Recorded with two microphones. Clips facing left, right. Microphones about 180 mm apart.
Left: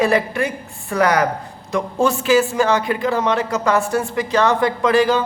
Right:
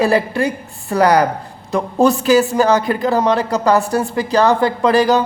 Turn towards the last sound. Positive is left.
turn(degrees=-40)  # may be behind; listen again after turning